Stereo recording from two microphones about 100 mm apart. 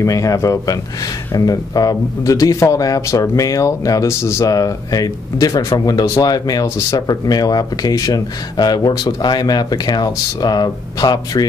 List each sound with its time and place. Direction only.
0.0 s a man's voice: 35° left (ahead or behind)